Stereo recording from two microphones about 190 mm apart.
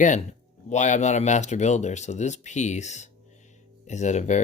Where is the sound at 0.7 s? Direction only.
40° left (ahead or behind).